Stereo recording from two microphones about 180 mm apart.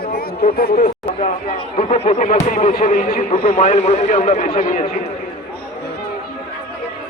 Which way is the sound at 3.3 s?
35° left (ahead or behind).